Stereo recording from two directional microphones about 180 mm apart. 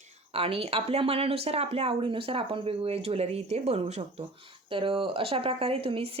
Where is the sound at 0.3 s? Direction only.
30° right (ahead or behind).